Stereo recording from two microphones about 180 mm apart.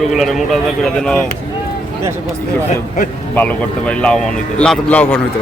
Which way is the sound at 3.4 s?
5° left (ahead or behind).